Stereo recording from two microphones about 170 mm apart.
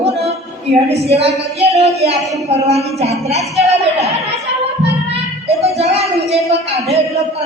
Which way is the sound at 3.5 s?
40° right (ahead or behind).